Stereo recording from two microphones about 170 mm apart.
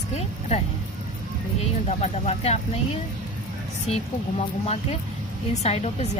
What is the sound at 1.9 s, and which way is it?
A woman's voice, 40° left (ahead or behind).